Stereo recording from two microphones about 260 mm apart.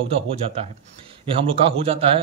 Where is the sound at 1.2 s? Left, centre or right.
Right.